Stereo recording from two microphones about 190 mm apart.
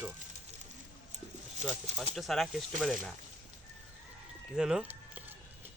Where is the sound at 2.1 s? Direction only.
Centre (ahead or behind).